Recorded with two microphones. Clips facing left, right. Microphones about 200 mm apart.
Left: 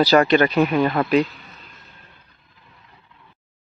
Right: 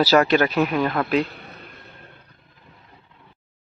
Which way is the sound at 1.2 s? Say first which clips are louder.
Left 3 dB; 60° right (ahead or behind).